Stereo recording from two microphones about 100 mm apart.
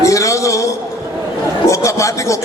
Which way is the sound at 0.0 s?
30° left (ahead or behind).